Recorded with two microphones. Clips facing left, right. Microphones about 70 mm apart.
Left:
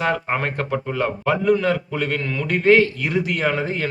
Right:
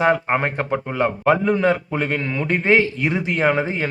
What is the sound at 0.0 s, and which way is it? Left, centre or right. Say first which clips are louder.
A man's voice: right 4 dB; centre.